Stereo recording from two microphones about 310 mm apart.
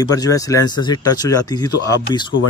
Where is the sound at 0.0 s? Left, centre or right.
Centre.